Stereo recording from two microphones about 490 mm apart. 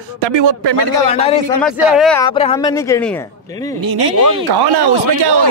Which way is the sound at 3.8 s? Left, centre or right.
Right.